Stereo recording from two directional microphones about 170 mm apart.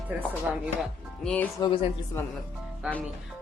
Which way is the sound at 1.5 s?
25° left (ahead or behind).